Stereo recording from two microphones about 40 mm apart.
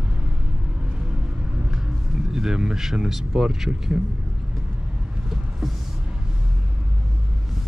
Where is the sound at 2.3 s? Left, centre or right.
Centre.